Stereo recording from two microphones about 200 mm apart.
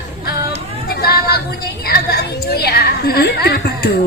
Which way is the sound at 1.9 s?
50° left (ahead or behind).